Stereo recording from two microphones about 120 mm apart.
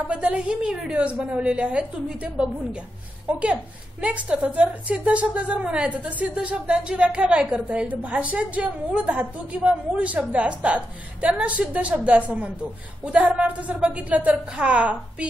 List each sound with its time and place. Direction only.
0.1 s a woman's voice: 10° right (ahead or behind)
3.3 s a woman's voice: 10° right (ahead or behind)